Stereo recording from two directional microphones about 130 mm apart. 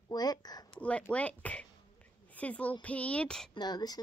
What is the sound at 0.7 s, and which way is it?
A woman's voice, 10° left (ahead or behind).